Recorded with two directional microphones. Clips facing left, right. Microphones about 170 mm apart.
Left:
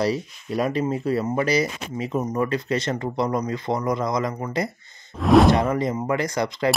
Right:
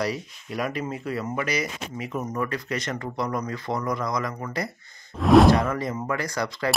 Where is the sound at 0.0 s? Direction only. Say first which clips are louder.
Left 5 dB; 30° left (ahead or behind).